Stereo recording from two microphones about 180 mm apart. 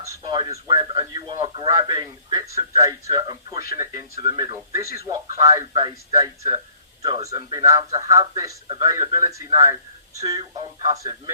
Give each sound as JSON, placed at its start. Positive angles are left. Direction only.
{"t": 0.2, "sound": "a man's voice", "side_deg": -25}
{"t": 5.4, "sound": "a man's voice", "side_deg": -20}